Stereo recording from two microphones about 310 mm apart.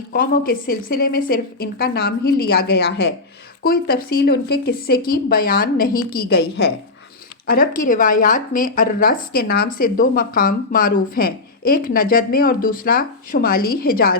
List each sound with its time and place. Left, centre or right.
0.1 s a woman's voice: left